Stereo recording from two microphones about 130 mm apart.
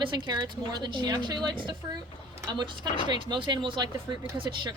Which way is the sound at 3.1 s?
35° right (ahead or behind).